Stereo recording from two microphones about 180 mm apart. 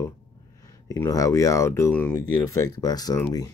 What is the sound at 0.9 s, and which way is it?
Speech, 15° left (ahead or behind).